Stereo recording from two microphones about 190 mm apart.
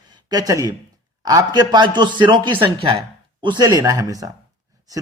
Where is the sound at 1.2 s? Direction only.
20° right (ahead or behind).